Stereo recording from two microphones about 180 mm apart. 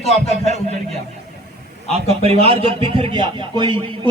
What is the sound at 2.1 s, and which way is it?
Speech, 35° right (ahead or behind).